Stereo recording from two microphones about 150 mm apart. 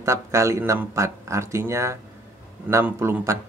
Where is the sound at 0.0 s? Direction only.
20° right (ahead or behind).